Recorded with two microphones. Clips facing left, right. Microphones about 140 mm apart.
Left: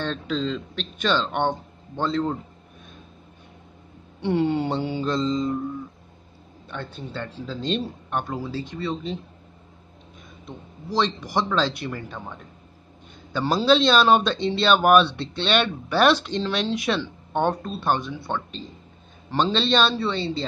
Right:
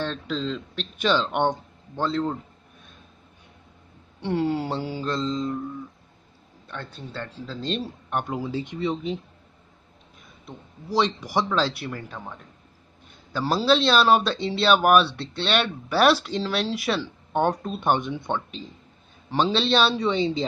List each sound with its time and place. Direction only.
0.0 s speech: centre (ahead or behind)
2.0 s speech: centre (ahead or behind)
4.2 s speech: centre (ahead or behind)
6.7 s speech: centre (ahead or behind)
8.2 s a man's voice: 15° right (ahead or behind)
10.4 s a man's voice: 10° right (ahead or behind)